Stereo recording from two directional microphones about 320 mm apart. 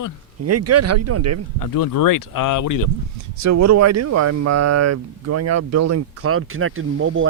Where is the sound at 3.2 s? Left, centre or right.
Right.